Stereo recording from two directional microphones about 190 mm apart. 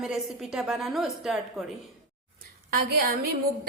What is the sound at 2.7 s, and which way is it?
Speech, 55° right (ahead or behind).